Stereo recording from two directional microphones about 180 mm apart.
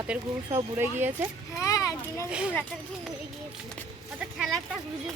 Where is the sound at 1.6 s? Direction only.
20° left (ahead or behind).